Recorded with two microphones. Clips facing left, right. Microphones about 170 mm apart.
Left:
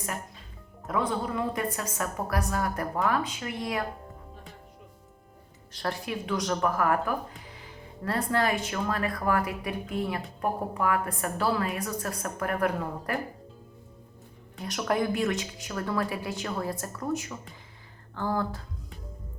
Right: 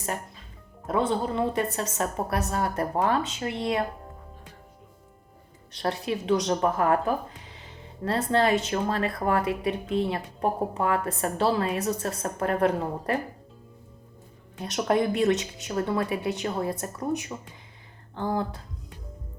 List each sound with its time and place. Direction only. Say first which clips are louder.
0.9 s speech: right 3 dB; 30° right (ahead or behind)
5.7 s speech: right 4 dB; 25° right (ahead or behind)
14.6 s speech: right 4 dB; 25° right (ahead or behind)